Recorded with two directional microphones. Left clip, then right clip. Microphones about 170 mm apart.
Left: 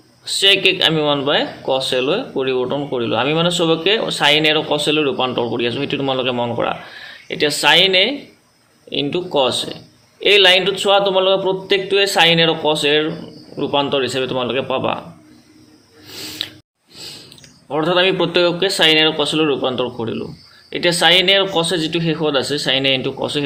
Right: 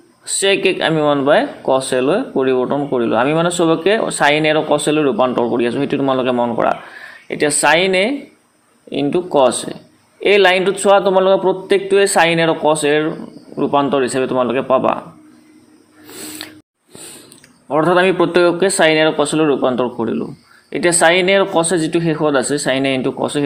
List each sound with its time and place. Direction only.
0.3 s speech: 35° right (ahead or behind)
16.0 s snort: 30° right (ahead or behind)
17.7 s speech: 35° right (ahead or behind)